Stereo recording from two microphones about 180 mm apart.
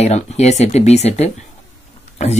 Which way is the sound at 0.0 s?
35° left (ahead or behind).